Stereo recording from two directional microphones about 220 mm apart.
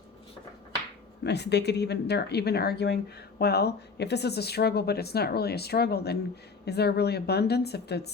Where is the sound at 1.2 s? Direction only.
50° left (ahead or behind).